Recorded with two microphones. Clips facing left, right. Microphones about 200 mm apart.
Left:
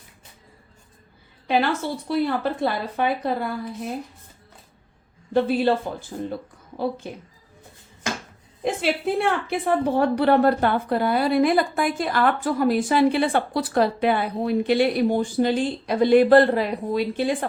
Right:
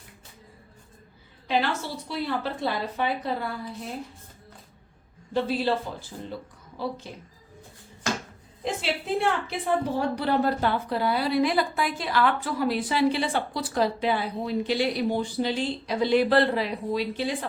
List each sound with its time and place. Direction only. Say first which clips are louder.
1.5 s a woman's voice: left 4 dB; 55° left (ahead or behind)
5.3 s a woman's voice: left 5 dB; 55° left (ahead or behind)
8.6 s a woman's voice: left 6 dB; 55° left (ahead or behind)